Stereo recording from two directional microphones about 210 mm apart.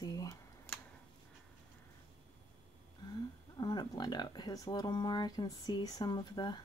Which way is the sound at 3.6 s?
20° left (ahead or behind).